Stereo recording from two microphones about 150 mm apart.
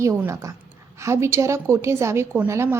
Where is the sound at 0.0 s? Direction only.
20° right (ahead or behind).